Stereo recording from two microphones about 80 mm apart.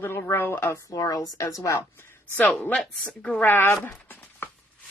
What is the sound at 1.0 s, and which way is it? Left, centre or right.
Speech, left.